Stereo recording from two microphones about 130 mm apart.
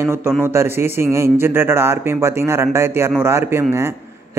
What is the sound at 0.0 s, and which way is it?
Speech, 20° right (ahead or behind).